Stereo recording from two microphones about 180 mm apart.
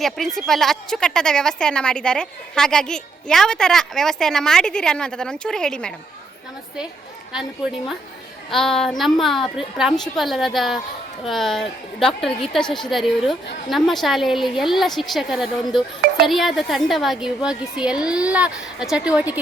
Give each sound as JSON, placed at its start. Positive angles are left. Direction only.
{"t": 0.0, "sound": "speech", "side_deg": 0}
{"t": 7.3, "sound": "speech", "side_deg": -5}